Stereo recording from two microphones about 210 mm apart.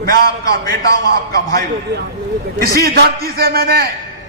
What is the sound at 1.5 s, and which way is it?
A man's voice, 45° right (ahead or behind).